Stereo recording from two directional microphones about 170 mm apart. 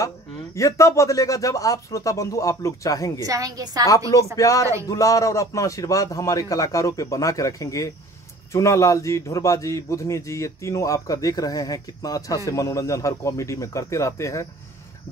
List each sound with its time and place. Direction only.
0.6 s speech: 20° left (ahead or behind)
3.2 s a woman's voice: 20° right (ahead or behind)
4.4 s speech: 20° left (ahead or behind)